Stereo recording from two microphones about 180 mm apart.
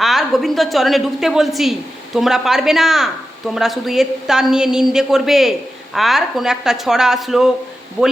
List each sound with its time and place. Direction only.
0.0 s speech: centre (ahead or behind)